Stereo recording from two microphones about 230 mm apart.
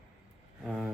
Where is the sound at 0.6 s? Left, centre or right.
Centre.